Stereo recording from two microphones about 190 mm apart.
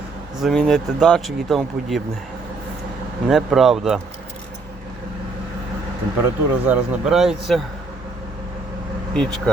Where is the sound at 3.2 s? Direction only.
Centre (ahead or behind).